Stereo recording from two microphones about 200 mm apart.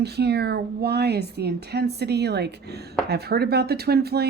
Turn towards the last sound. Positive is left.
turn(degrees=-50)  # may be behind; listen again after turning